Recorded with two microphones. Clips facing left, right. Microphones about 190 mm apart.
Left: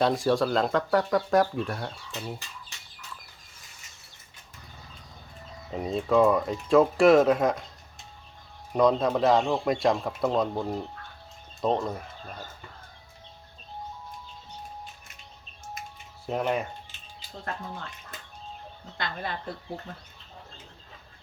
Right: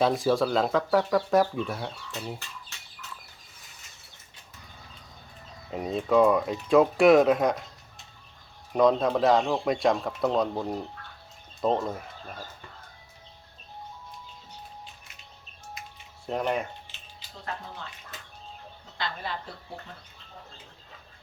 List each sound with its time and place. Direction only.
0.0 s speech: centre (ahead or behind)
5.7 s speech: 5° right (ahead or behind)
8.7 s speech: centre (ahead or behind)
16.2 s speech: centre (ahead or behind)
18.9 s speech: 50° left (ahead or behind)